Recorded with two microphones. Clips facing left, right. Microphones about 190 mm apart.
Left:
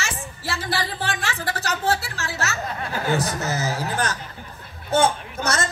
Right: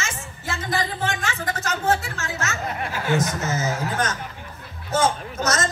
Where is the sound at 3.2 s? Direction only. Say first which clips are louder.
Right 1 dB; 35° left (ahead or behind).